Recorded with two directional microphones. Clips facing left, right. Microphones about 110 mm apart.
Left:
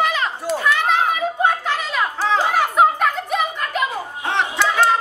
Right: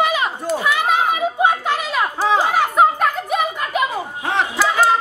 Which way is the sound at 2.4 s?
Centre (ahead or behind).